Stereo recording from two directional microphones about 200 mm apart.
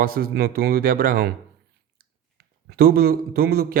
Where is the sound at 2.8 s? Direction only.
50° right (ahead or behind).